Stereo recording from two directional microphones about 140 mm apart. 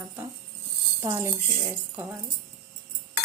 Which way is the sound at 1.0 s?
20° right (ahead or behind).